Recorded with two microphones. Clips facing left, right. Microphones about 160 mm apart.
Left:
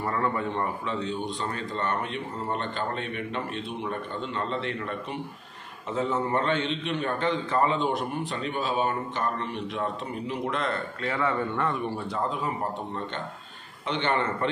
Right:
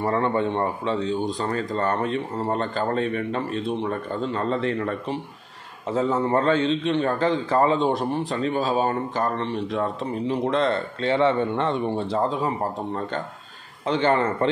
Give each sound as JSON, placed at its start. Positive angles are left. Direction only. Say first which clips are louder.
{"t": 0.0, "sound": "a man's voice", "louder": "right 6 dB", "side_deg": -30}
{"t": 13.8, "sound": "a man's voice", "louder": "right 6 dB", "side_deg": -35}